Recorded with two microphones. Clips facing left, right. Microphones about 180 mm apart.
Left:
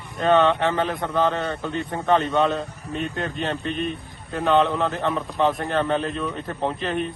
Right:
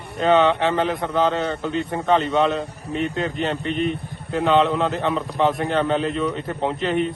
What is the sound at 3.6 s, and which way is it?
Speech, 65° right (ahead or behind).